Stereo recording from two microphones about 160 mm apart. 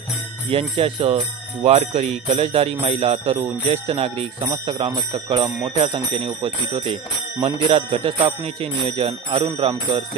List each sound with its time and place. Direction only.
0.5 s speech: 35° right (ahead or behind)